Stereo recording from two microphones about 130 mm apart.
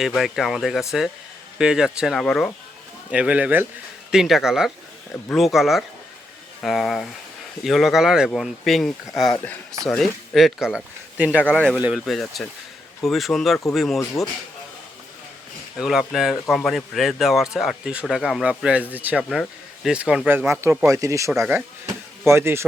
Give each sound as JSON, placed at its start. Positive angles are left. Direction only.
{"t": 0.0, "sound": "speech", "side_deg": 0}
{"t": 2.2, "sound": "speech", "side_deg": 5}
{"t": 3.1, "sound": "speech", "side_deg": -10}
{"t": 4.1, "sound": "speech", "side_deg": 0}
{"t": 11.4, "sound": "speech", "side_deg": 5}
{"t": 11.8, "sound": "speech", "side_deg": -5}
{"t": 15.8, "sound": "speech", "side_deg": -5}
{"t": 19.3, "sound": "speech", "side_deg": 0}